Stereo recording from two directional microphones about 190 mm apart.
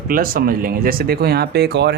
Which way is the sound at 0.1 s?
50° right (ahead or behind).